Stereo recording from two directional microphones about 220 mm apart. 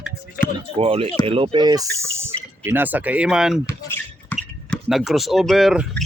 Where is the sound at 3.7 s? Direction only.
10° left (ahead or behind).